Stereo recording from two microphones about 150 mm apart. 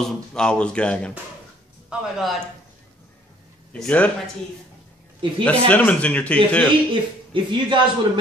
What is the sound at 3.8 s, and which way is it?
Speech, 10° left (ahead or behind).